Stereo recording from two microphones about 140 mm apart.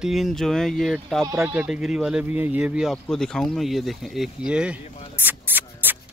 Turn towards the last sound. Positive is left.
turn(degrees=-15)  # may be behind; listen again after turning